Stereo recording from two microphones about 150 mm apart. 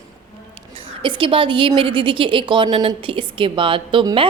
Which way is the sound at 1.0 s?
35° right (ahead or behind).